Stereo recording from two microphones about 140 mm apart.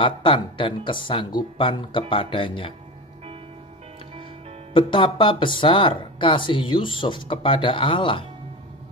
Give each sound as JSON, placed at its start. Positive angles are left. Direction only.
{"t": 0.0, "sound": "speech", "side_deg": 35}
{"t": 4.7, "sound": "speech", "side_deg": 35}